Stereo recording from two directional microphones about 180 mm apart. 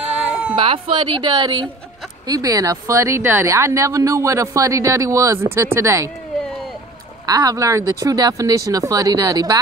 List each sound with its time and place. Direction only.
0.3 s baby cry: 5° right (ahead or behind)
0.6 s a woman's voice: 30° right (ahead or behind)
7.2 s speech: 20° right (ahead or behind)